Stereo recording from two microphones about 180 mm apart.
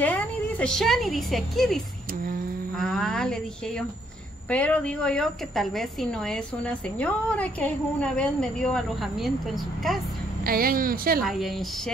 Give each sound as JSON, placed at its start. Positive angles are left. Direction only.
{"t": 0.0, "sound": "a woman's voice", "side_deg": 10}
{"t": 2.8, "sound": "a woman's voice", "side_deg": 5}
{"t": 4.5, "sound": "a woman's voice", "side_deg": 5}
{"t": 10.4, "sound": "a woman's voice", "side_deg": -55}
{"t": 11.2, "sound": "a woman's voice", "side_deg": 0}